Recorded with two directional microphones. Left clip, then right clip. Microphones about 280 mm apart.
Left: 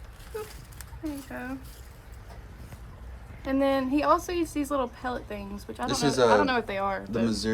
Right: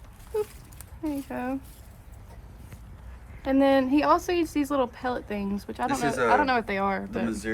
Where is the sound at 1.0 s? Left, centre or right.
Right.